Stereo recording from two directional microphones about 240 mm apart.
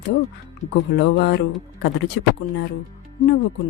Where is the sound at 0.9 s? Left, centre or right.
Left.